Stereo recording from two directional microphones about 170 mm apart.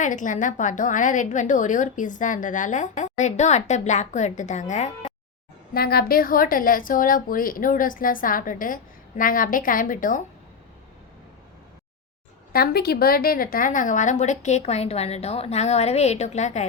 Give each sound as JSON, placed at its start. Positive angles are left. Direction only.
{"t": 0.0, "sound": "a woman's voice", "side_deg": 50}
{"t": 5.7, "sound": "a woman's voice", "side_deg": 65}
{"t": 12.5, "sound": "a woman's voice", "side_deg": 65}